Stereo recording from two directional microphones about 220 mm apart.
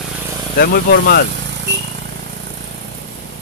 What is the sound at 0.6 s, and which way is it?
Speech, 45° left (ahead or behind).